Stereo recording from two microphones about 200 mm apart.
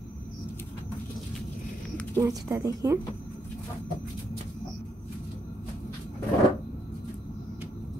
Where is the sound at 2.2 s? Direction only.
15° right (ahead or behind).